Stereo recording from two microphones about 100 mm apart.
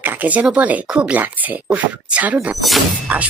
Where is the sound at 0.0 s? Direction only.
15° right (ahead or behind).